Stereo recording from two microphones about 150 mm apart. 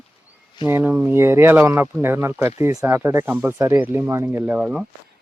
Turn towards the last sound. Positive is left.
turn(degrees=-5)  # may be behind; listen again after turning